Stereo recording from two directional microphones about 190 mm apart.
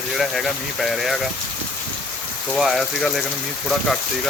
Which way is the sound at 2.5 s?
Centre (ahead or behind).